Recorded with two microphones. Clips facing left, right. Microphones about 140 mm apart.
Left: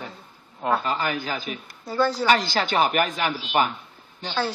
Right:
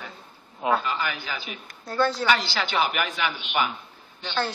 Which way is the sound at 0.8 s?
40° left (ahead or behind).